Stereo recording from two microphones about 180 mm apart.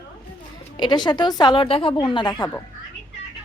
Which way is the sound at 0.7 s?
25° left (ahead or behind).